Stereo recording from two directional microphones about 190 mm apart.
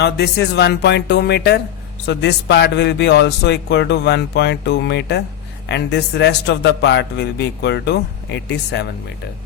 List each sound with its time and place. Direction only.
0.0 s speech: 60° left (ahead or behind)